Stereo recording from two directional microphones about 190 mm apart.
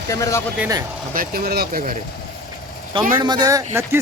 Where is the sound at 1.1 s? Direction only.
50° right (ahead or behind).